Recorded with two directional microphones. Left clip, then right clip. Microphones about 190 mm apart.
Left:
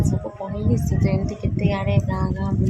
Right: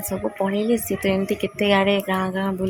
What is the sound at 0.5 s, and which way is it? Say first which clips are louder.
Speech: right 5 dB; 20° right (ahead or behind).